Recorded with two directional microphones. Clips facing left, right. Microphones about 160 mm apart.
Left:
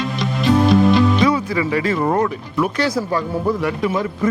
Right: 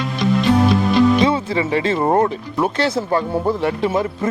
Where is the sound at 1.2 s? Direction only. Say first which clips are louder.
Even; 25° right (ahead or behind).